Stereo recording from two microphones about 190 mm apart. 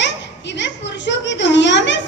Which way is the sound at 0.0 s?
70° left (ahead or behind).